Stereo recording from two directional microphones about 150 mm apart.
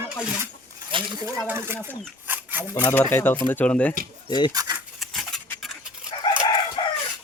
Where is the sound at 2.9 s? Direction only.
15° left (ahead or behind).